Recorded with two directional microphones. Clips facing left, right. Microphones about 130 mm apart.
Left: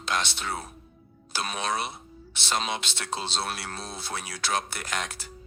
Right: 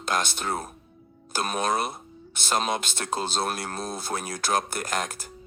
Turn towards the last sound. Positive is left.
turn(degrees=-45)  # may be behind; listen again after turning